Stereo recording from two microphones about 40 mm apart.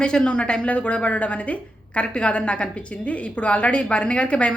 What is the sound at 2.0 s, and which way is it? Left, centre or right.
A woman's voice, left.